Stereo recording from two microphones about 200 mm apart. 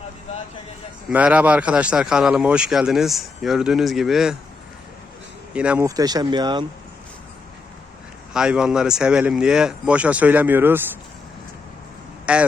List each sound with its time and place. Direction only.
1.1 s speech: 5° right (ahead or behind)
5.5 s speech: 5° right (ahead or behind)
5.8 s speech: 20° right (ahead or behind)
8.3 s speech: 5° right (ahead or behind)
12.2 s speech: 5° right (ahead or behind)